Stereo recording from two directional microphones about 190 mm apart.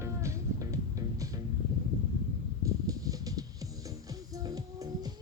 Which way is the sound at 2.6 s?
20° right (ahead or behind).